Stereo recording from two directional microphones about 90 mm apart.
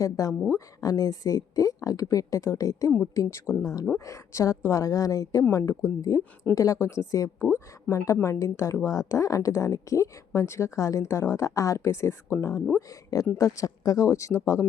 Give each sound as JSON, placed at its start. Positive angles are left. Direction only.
{"t": 0.0, "sound": "a woman's voice", "side_deg": 40}